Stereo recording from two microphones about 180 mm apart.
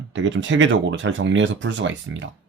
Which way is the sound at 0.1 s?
90° right.